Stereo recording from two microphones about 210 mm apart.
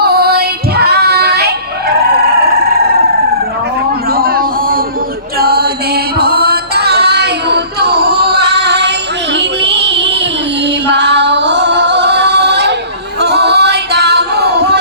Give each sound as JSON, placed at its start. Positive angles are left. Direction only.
{"t": 0.0, "sound": "female singing", "side_deg": -50}
{"t": 4.1, "sound": "a sound", "side_deg": -45}
{"t": 5.4, "sound": "music", "side_deg": -50}
{"t": 10.8, "sound": "female singing", "side_deg": -55}
{"t": 13.1, "sound": "music", "side_deg": -50}